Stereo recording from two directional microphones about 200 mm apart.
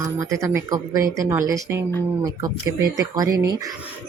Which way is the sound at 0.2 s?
15° right (ahead or behind).